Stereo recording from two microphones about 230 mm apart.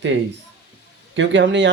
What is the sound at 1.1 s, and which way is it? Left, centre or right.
Speech, right.